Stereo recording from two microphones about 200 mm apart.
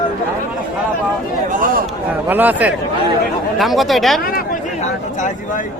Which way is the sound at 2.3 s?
10° right (ahead or behind).